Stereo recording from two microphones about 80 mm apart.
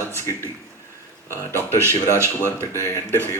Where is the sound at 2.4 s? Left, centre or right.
Left.